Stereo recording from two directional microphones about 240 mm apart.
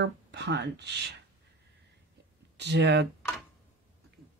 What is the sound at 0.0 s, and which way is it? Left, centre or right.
Speech, right.